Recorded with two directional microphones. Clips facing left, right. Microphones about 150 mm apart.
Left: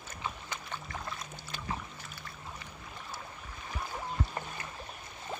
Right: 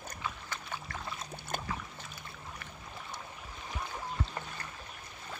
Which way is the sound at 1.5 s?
50° right (ahead or behind).